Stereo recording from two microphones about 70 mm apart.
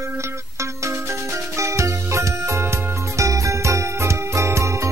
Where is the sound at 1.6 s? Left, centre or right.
Right.